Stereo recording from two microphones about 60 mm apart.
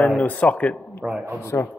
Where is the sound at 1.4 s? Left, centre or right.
Left.